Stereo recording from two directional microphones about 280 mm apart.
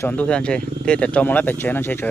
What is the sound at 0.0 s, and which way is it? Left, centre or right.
Speech, centre.